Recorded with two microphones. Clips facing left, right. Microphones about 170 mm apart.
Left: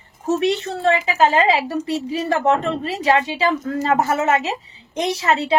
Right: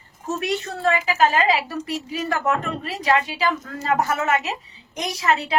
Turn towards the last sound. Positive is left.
turn(degrees=30)  # may be behind; listen again after turning